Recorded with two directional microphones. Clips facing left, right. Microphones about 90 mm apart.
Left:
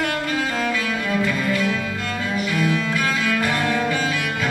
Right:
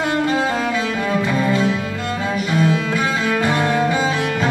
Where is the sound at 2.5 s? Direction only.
30° right (ahead or behind).